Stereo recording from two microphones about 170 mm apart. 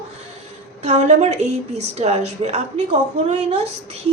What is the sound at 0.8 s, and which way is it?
A woman's voice, 40° right (ahead or behind).